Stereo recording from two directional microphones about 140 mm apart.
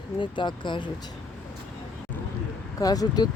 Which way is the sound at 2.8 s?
25° left (ahead or behind).